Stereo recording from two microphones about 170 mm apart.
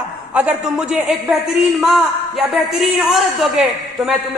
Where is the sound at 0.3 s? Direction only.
5° right (ahead or behind).